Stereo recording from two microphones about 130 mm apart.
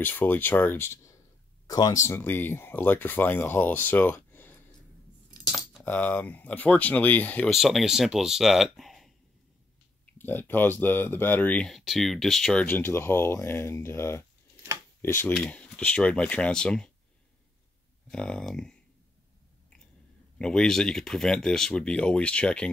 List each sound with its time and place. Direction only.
0.0 s speech: 15° left (ahead or behind)
5.9 s speech: 10° left (ahead or behind)
7.5 s speech: centre (ahead or behind)
10.1 s speech: 15° left (ahead or behind)
12.6 s speech: 20° left (ahead or behind)
18.1 s speech: 5° left (ahead or behind)
20.3 s speech: 5° left (ahead or behind)